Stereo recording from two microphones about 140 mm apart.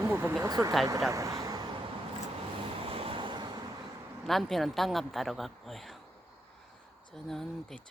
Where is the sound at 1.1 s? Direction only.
25° right (ahead or behind).